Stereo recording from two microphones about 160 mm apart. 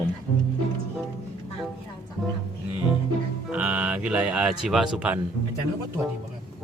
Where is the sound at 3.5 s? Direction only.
5° right (ahead or behind).